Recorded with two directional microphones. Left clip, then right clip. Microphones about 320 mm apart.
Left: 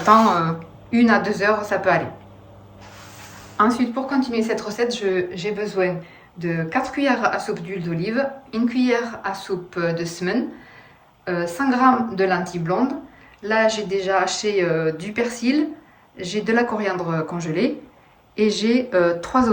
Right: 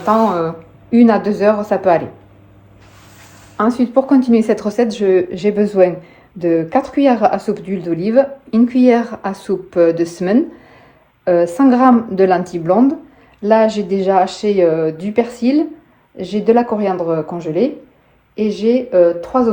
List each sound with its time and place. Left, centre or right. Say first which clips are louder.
0.0 s speech: right 1 dB; centre
3.6 s speech: right 5 dB; centre